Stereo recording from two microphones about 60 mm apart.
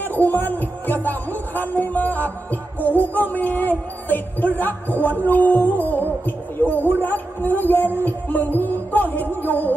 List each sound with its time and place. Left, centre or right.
0.0 s speech: left